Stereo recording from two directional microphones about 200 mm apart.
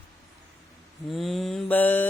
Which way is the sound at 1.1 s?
Centre (ahead or behind).